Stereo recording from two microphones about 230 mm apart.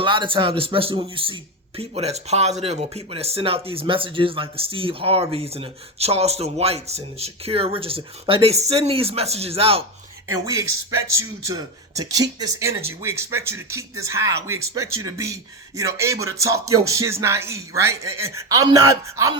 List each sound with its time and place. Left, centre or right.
0.0 s speech: right
10.4 s a man's voice: centre